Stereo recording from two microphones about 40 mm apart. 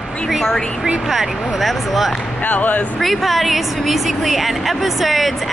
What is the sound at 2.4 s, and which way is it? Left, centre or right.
Speech, left.